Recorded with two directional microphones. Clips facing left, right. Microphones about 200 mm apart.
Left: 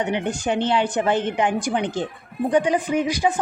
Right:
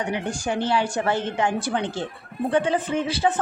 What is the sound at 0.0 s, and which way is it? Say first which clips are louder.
Speech: left 3 dB; 20° left (ahead or behind).